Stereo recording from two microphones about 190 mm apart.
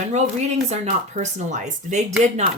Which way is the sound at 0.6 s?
40° right (ahead or behind).